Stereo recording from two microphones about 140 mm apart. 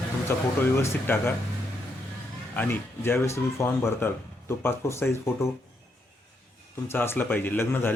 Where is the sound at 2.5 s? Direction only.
15° left (ahead or behind).